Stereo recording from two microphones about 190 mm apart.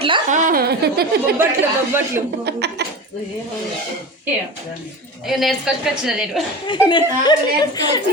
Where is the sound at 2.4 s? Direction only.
60° right (ahead or behind).